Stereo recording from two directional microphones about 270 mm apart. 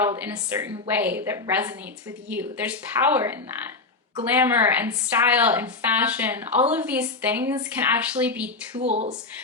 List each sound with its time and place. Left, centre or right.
0.0 s a woman's voice: centre
4.4 s a woman's voice: centre
8.7 s speech: right